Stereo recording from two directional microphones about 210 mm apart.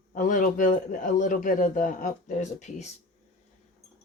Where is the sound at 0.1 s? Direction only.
40° left (ahead or behind).